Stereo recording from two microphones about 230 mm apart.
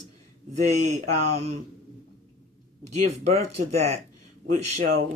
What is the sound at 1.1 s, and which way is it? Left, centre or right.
Speech, right.